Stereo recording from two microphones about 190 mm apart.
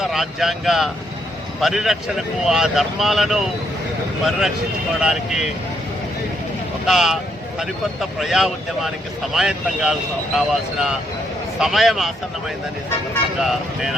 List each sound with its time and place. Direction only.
0.0 s speech: centre (ahead or behind)
6.8 s speech: centre (ahead or behind)
8.2 s speech: centre (ahead or behind)
13.4 s speech: centre (ahead or behind)